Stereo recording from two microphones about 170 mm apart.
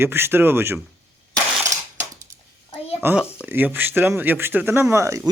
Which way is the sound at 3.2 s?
15° left (ahead or behind).